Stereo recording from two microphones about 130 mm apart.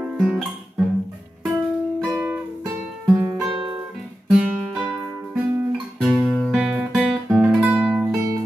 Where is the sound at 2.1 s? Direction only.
15° right (ahead or behind).